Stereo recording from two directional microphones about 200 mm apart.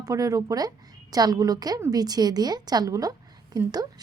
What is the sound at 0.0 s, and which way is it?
Speech, 15° right (ahead or behind).